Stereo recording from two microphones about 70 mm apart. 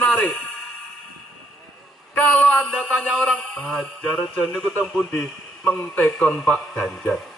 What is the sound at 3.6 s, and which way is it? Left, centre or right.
Speech, centre.